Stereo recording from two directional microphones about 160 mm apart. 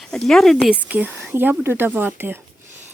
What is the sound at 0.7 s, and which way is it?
A woman's voice, 10° right (ahead or behind).